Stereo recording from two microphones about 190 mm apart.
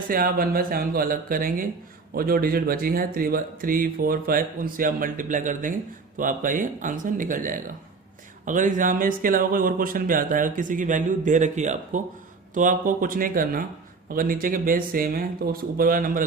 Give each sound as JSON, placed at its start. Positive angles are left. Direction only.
{"t": 0.1, "sound": "speech", "side_deg": -50}